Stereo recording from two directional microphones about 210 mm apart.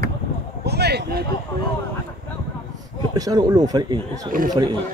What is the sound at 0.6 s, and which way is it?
Speech, 50° right (ahead or behind).